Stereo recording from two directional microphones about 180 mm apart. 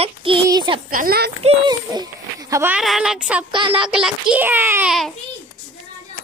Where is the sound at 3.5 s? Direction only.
30° right (ahead or behind).